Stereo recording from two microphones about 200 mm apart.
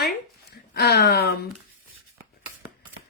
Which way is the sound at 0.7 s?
55° left (ahead or behind).